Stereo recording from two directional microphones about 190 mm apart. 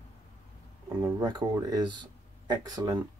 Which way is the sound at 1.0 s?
20° right (ahead or behind).